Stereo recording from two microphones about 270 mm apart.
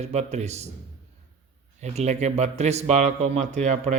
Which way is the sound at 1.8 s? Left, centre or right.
Right.